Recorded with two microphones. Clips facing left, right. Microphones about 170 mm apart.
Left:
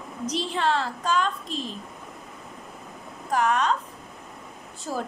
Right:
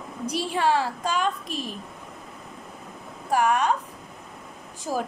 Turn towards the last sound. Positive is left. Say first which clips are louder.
# right 3 dB
turn(degrees=-15)  # may be behind; listen again after turning